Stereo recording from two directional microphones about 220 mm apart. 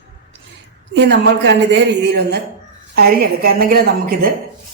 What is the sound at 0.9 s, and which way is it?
A woman's voice, 55° right (ahead or behind).